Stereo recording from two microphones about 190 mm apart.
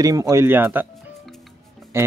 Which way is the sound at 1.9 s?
15° right (ahead or behind).